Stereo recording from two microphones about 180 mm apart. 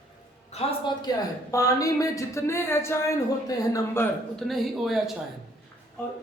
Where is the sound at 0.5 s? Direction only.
35° left (ahead or behind).